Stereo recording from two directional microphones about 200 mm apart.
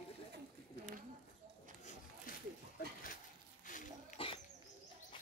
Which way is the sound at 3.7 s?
40° left (ahead or behind).